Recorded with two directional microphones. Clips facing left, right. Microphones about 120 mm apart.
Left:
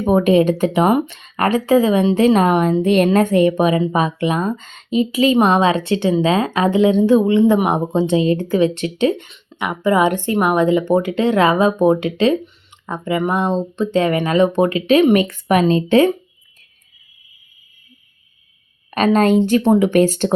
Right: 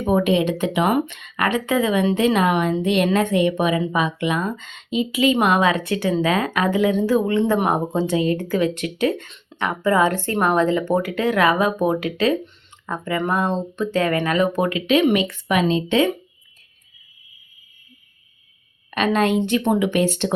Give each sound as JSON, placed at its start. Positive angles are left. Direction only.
{"t": 0.0, "sound": "a woman's voice", "side_deg": 40}
{"t": 18.9, "sound": "a woman's voice", "side_deg": 40}